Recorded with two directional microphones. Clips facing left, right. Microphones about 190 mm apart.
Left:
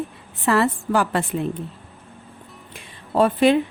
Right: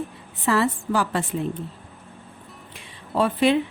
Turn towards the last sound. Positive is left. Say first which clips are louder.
# left 3 dB
turn(degrees=45)  # may be behind; listen again after turning